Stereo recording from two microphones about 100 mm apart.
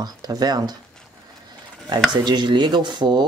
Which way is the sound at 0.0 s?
45° right (ahead or behind).